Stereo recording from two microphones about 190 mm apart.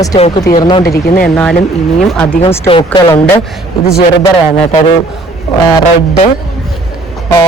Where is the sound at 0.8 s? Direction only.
55° left (ahead or behind).